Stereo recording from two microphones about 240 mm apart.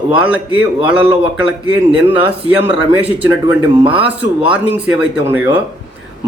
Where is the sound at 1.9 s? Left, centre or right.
Centre.